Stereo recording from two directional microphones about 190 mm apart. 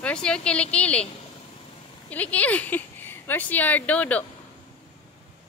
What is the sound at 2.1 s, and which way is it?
Speech, 10° left (ahead or behind).